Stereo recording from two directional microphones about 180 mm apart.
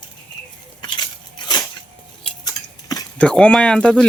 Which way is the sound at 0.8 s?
25° left (ahead or behind).